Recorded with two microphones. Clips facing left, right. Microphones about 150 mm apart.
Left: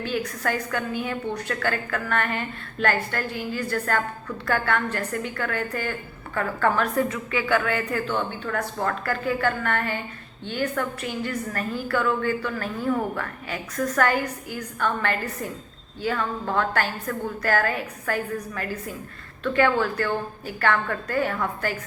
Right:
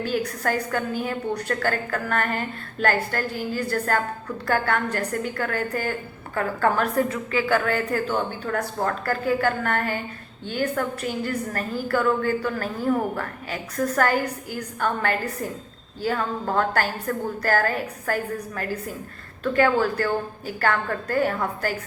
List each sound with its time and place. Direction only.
0.2 s a woman's voice: 40° right (ahead or behind)